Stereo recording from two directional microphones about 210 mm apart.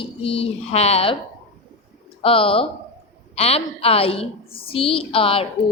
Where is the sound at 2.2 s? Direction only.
25° left (ahead or behind).